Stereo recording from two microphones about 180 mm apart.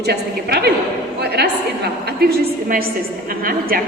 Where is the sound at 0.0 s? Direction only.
65° right (ahead or behind).